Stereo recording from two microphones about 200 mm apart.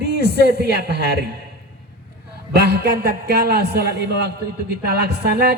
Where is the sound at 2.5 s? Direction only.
55° right (ahead or behind).